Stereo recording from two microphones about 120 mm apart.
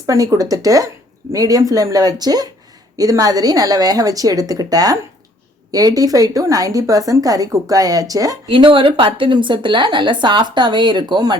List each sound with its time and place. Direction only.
0.0 s a woman's voice: 25° right (ahead or behind)
8.4 s a woman's voice: 45° right (ahead or behind)